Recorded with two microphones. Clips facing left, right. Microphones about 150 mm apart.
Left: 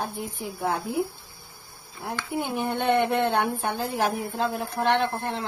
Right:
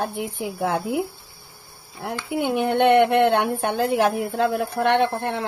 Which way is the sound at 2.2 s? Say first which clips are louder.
Right 6 dB; 75° right (ahead or behind).